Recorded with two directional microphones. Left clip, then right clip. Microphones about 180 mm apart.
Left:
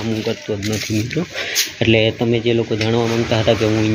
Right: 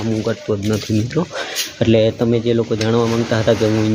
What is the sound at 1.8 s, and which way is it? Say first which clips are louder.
Speech: right 2 dB; 15° right (ahead or behind).